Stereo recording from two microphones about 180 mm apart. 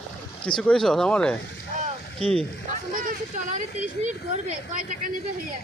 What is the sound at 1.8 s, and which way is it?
Boat, 35° right (ahead or behind).